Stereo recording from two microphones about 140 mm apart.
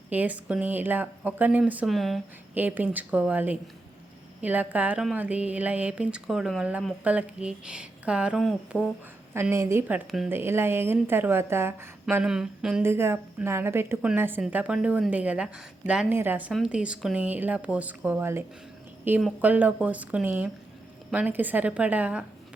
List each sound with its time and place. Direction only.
0.1 s a woman's voice: 10° right (ahead or behind)
1.9 s speech: centre (ahead or behind)
2.6 s a woman's voice: 10° right (ahead or behind)
9.3 s a woman's voice: 20° right (ahead or behind)
12.2 s speech: 5° right (ahead or behind)
12.8 s a woman's voice: 20° right (ahead or behind)
16.5 s a woman's voice: 5° right (ahead or behind)